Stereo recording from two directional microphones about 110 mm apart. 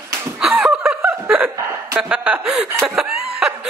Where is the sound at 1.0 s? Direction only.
15° right (ahead or behind).